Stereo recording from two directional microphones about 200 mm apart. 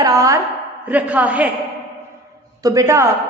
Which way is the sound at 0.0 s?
15° right (ahead or behind).